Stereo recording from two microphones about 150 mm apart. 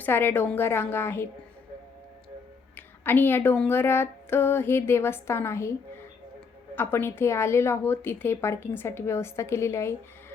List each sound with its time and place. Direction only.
0.0 s a woman's voice: 15° left (ahead or behind)
2.7 s a woman's voice: 15° left (ahead or behind)
6.7 s a woman's voice: 15° left (ahead or behind)